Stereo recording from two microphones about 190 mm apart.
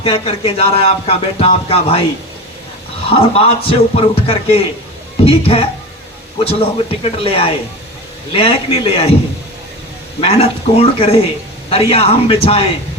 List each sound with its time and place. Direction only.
0.0 s speech: 30° left (ahead or behind)
3.1 s speech: 30° left (ahead or behind)
10.2 s speech: 30° left (ahead or behind)